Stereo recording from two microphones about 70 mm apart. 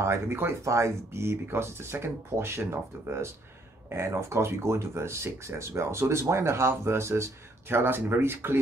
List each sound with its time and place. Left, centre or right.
0.0 s speech: right